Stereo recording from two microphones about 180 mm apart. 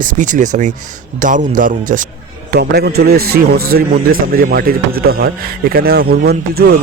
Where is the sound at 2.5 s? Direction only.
60° right (ahead or behind).